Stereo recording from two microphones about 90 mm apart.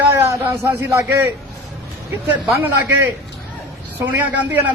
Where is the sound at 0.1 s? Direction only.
30° right (ahead or behind).